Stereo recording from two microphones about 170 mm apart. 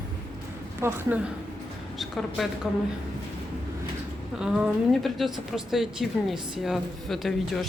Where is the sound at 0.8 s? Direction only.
15° right (ahead or behind).